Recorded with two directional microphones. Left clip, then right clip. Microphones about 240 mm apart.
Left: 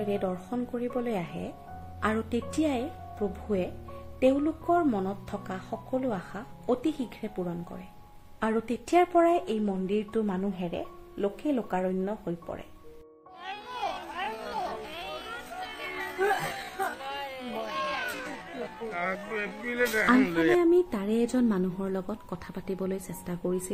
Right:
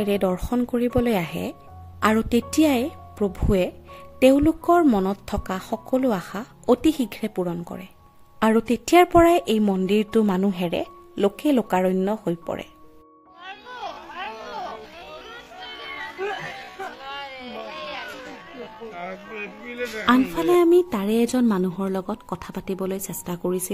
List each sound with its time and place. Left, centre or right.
0.0 s a woman's voice: right
13.5 s a sound: left
16.2 s music: centre
17.0 s a sound: left
18.9 s speech: centre
20.7 s speech: right